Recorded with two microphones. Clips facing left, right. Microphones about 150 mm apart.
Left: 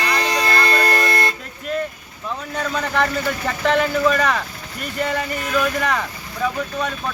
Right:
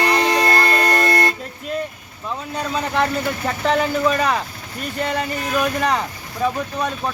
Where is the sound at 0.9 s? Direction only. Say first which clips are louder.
Right 2 dB; 40° right (ahead or behind).